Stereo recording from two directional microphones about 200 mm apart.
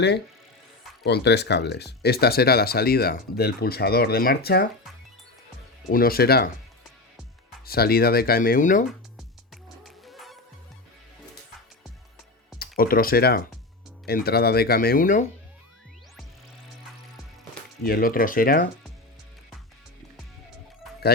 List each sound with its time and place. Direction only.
1.0 s speech: 55° left (ahead or behind)
5.9 s speech: 45° left (ahead or behind)
7.6 s speech: 50° left (ahead or behind)
9.8 s music: centre (ahead or behind)
12.5 s speech: 45° left (ahead or behind)
17.8 s speech: 45° left (ahead or behind)